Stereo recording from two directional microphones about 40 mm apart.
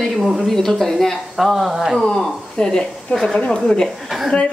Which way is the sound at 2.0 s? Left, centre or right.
Centre.